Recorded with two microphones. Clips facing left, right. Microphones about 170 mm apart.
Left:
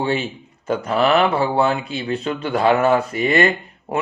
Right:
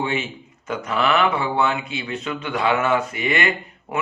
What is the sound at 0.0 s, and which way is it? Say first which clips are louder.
Speech: left 3 dB; 35° left (ahead or behind).